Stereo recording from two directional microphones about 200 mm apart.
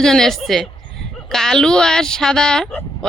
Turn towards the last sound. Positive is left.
turn(degrees=5)  # may be behind; listen again after turning